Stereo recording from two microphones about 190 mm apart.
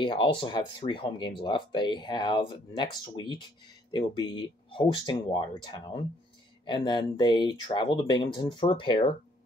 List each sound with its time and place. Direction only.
0.0 s speech: 25° left (ahead or behind)